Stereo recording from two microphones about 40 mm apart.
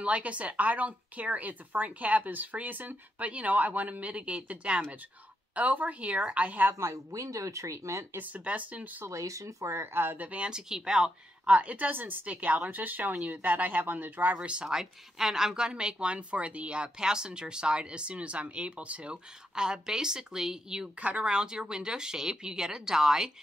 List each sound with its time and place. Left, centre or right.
0.0 s speech: right
5.5 s speech: right
8.2 s speech: right
10.1 s speech: right
10.4 s a woman's voice: centre
11.4 s speech: right
14.7 s a woman's voice: centre; by 19.1 s right
19.5 s a woman's voice: centre
21.0 s speech: right
21.3 s a woman's voice: right